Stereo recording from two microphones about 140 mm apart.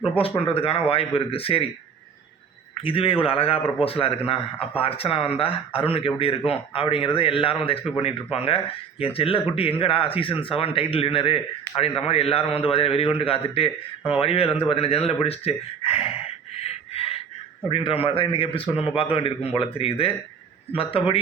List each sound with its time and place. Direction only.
0.2 s a man's voice: 40° left (ahead or behind)
2.8 s a man's voice: 40° left (ahead or behind)
16.9 s a sound: 45° left (ahead or behind)
17.7 s a man's voice: 40° left (ahead or behind)